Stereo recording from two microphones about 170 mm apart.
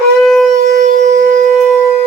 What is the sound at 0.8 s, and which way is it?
Civil defense siren, 45° right (ahead or behind).